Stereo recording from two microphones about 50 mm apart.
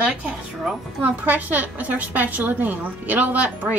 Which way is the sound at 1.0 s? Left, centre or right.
Right.